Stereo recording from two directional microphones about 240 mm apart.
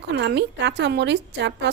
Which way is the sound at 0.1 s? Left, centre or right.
Right.